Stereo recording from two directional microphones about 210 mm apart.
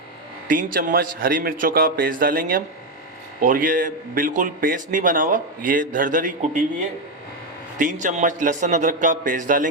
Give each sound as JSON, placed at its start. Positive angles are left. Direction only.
{"t": 0.4, "sound": "a man's voice", "side_deg": -40}
{"t": 7.8, "sound": "a man's voice", "side_deg": -35}